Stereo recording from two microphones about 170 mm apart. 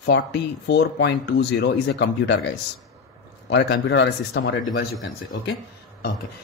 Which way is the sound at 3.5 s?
90° left.